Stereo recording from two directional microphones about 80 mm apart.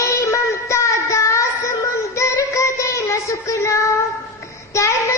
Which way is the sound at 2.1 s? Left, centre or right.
Left.